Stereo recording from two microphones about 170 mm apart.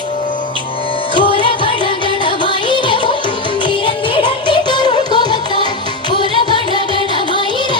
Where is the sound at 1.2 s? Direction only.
30° left (ahead or behind).